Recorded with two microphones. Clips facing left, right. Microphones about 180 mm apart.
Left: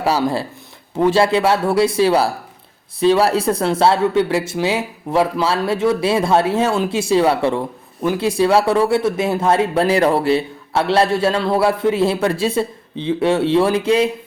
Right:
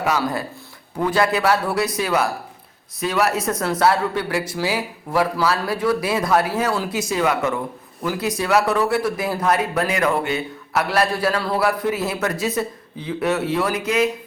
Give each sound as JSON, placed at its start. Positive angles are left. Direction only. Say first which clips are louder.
{"t": 0.9, "sound": "speech", "louder": "left 5 dB", "side_deg": 25}